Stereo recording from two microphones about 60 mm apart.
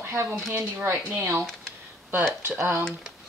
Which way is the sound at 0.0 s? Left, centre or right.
Right.